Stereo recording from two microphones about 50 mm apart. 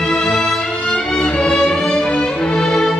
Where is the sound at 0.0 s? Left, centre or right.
Centre.